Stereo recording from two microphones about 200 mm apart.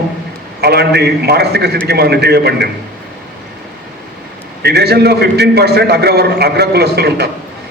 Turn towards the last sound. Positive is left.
turn(degrees=-55)  # may be behind; listen again after turning